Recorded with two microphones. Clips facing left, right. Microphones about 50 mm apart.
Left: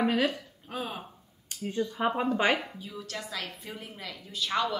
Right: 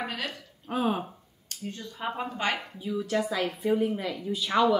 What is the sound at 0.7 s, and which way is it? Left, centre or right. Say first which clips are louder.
Speech: right 9 dB; centre.